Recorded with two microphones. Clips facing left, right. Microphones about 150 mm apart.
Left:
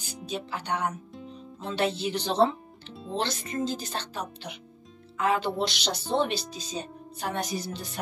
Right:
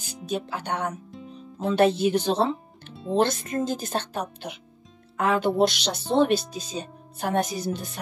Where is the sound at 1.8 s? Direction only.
50° right (ahead or behind).